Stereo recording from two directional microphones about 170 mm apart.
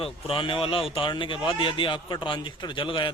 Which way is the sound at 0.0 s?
30° left (ahead or behind).